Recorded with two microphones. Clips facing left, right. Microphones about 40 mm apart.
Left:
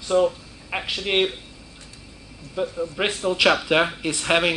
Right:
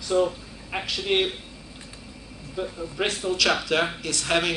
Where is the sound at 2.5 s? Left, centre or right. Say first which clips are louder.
Left 4 dB; centre.